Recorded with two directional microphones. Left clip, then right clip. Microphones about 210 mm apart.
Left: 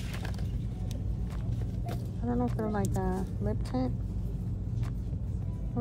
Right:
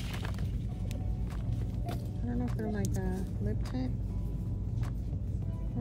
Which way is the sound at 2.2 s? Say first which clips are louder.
Left 6 dB; 60° left (ahead or behind).